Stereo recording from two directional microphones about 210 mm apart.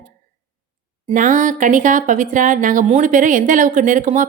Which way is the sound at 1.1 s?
40° right (ahead or behind).